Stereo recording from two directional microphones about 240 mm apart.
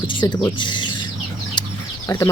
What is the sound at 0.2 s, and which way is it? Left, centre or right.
Speech, centre.